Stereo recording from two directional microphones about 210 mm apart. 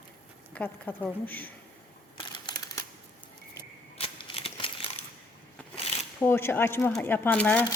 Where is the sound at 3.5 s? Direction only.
25° left (ahead or behind).